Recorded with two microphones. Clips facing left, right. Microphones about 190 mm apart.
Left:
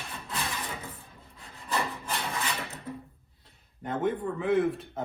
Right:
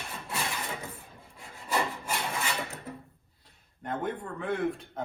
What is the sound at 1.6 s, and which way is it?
Wood, 10° right (ahead or behind).